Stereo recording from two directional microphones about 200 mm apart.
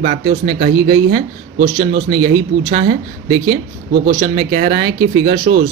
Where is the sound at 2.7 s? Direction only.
45° right (ahead or behind).